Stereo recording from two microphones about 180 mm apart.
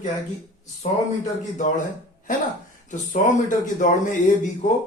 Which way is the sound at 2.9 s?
45° left (ahead or behind).